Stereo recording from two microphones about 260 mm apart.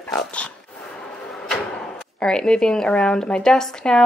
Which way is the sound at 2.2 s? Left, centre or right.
Centre.